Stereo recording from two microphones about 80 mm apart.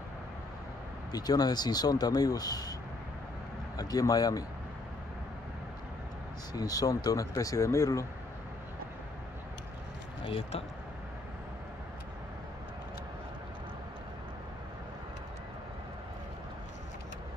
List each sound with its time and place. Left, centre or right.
1.1 s speech: left
3.7 s speech: left
6.5 s speech: left